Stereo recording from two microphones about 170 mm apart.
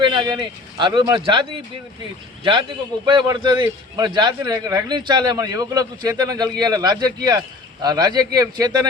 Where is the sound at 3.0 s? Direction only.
25° right (ahead or behind).